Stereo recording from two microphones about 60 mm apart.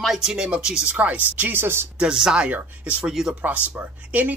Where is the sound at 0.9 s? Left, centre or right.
Right.